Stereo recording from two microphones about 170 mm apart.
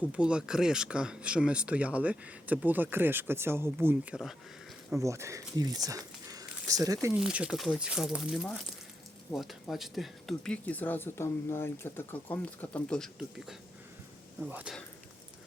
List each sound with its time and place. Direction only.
0.0 s speech: 5° right (ahead or behind)
4.9 s speech: 15° right (ahead or behind)
7.1 s speech: 5° right (ahead or behind)